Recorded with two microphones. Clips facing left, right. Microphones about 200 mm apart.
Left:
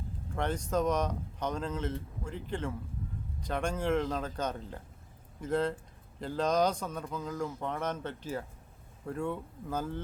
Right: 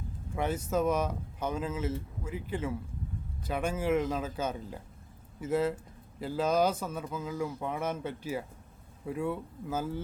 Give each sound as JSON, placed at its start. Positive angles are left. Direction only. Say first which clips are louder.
{"t": 0.3, "sound": "speech", "louder": "right 1 dB", "side_deg": -5}